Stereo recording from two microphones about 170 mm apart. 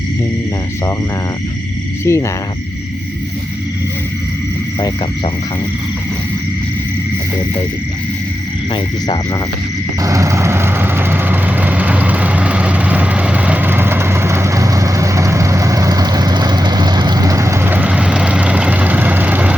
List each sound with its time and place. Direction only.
2.0 s speech: 15° left (ahead or behind)
8.7 s frog: 25° left (ahead or behind)
10.0 s vehicle: 20° right (ahead or behind)